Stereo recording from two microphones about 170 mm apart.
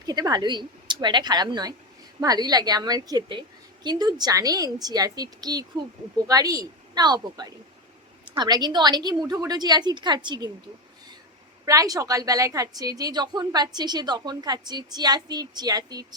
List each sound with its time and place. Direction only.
0.0 s a woman's voice: 25° right (ahead or behind)
11.6 s a woman's voice: 20° right (ahead or behind)